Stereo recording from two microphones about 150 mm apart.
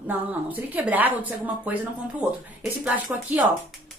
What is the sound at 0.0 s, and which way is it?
A woman's voice, 10° right (ahead or behind).